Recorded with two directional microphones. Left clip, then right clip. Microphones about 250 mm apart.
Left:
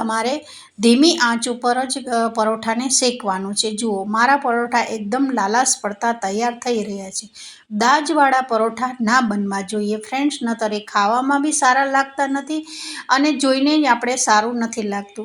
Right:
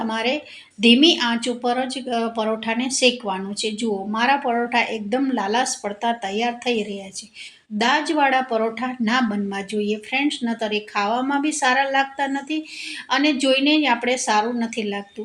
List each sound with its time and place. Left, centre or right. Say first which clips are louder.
0.0 s speech: left 2 dB; left